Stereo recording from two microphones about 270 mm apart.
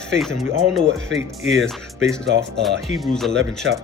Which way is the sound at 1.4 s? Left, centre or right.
Centre.